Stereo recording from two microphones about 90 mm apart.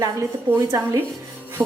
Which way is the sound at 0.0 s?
35° right (ahead or behind).